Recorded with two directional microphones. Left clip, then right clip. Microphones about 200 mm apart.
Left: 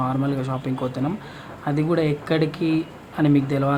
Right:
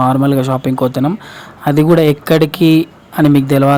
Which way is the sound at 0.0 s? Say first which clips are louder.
Right 12 dB; 30° right (ahead or behind).